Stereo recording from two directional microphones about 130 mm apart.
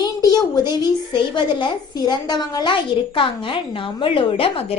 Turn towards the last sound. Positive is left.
turn(degrees=45)  # may be behind; listen again after turning